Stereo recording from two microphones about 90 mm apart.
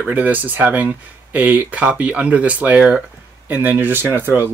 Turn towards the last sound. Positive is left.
turn(degrees=-25)  # may be behind; listen again after turning